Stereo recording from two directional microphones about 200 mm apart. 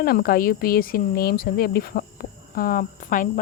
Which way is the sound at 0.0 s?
50° left (ahead or behind).